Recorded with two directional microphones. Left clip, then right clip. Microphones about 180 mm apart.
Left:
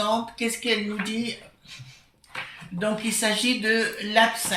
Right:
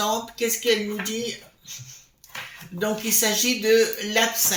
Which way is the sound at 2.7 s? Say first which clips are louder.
Right 2 dB; 45° right (ahead or behind).